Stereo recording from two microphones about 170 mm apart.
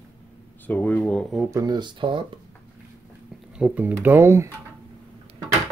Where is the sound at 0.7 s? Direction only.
10° left (ahead or behind).